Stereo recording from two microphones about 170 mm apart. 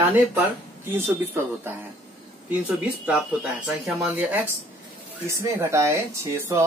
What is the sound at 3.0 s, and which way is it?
Speech, 5° right (ahead or behind).